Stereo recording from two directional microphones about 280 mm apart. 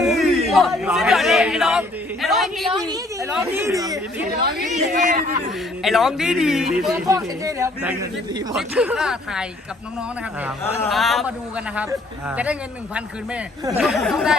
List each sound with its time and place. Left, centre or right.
0.0 s a sound: centre
2.2 s a man's voice: centre
2.8 s a woman's voice: centre
4.6 s speech: right
5.8 s a man's voice: centre
10.6 s a man's voice: centre
12.4 s a man's voice: centre